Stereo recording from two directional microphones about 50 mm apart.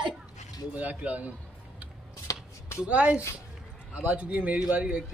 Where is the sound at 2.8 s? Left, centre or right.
Right.